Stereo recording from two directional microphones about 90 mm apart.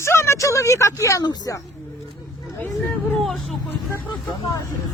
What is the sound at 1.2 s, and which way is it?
Speech, 45° left (ahead or behind).